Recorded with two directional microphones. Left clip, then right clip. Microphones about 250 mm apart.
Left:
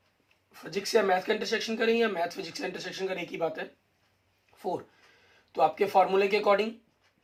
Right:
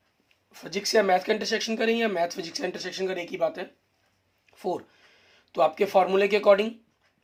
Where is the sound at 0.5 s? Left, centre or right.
Right.